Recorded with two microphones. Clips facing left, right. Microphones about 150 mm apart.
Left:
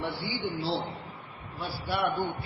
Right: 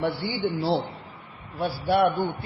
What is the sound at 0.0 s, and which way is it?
Speech, 60° right (ahead or behind).